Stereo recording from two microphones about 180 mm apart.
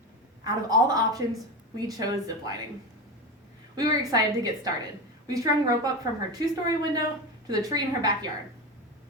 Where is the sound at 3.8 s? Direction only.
20° right (ahead or behind).